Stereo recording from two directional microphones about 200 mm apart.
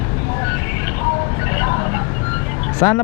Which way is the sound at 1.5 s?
15° left (ahead or behind).